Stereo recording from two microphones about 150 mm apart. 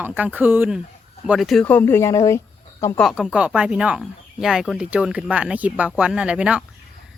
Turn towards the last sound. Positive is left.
turn(degrees=-5)  # may be behind; listen again after turning